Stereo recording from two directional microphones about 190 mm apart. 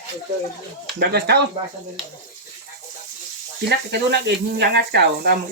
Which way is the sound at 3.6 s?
60° right (ahead or behind).